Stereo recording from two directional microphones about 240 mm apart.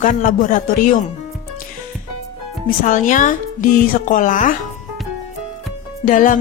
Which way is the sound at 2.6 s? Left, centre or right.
Left.